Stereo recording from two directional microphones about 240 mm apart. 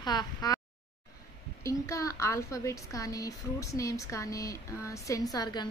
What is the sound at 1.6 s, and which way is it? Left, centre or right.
A woman's voice, centre.